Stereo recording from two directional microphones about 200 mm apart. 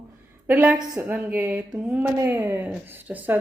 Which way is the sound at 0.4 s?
10° right (ahead or behind).